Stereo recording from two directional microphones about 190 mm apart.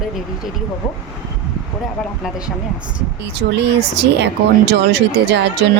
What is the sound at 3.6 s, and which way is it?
Speech, 60° right (ahead or behind).